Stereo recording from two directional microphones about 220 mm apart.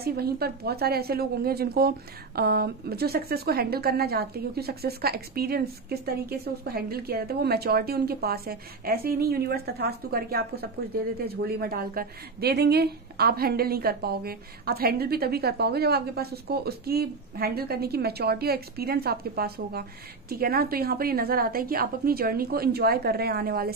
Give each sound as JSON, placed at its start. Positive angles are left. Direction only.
{"t": 0.0, "sound": "a woman's voice", "side_deg": -45}